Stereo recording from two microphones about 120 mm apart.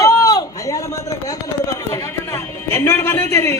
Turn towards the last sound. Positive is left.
turn(degrees=20)  # may be behind; listen again after turning